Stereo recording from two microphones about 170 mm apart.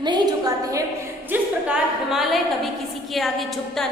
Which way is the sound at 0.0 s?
25° right (ahead or behind).